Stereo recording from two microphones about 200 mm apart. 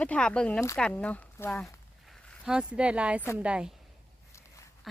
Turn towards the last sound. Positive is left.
turn(degrees=-5)  # may be behind; listen again after turning